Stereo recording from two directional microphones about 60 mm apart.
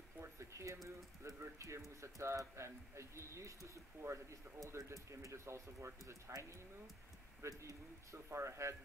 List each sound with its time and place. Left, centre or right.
0.2 s a sound: right
0.8 s speech: right
7.4 s speech: right
8.3 s speech: right